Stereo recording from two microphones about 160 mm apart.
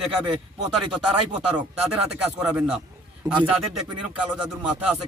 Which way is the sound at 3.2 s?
25° right (ahead or behind).